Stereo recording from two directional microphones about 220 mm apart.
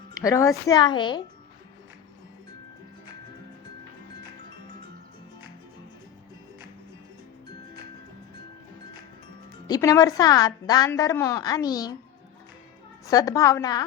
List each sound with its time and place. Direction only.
0.1 s a woman's voice: 15° left (ahead or behind)
9.6 s a woman's voice: 15° left (ahead or behind)
13.1 s a woman's voice: 15° left (ahead or behind)